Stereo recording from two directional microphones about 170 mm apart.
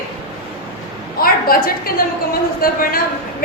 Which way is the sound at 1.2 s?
60° left (ahead or behind).